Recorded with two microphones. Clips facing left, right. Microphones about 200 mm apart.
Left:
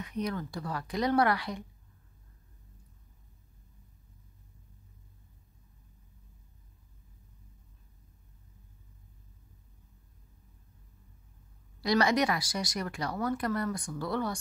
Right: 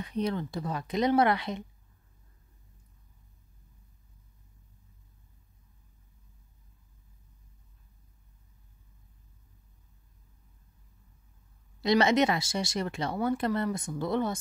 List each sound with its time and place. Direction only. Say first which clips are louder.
0.0 s speech: right 3 dB; 30° right (ahead or behind)
11.8 s speech: right 3 dB; 25° right (ahead or behind)